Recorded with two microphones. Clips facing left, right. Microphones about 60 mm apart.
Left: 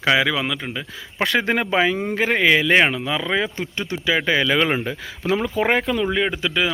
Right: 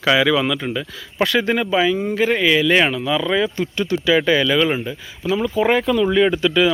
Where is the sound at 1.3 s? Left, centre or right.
Left; by 4.5 s centre.